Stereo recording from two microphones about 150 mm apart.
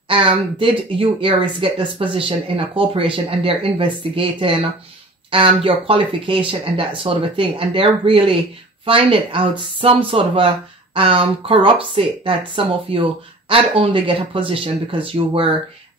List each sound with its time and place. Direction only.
0.1 s speech: 35° right (ahead or behind)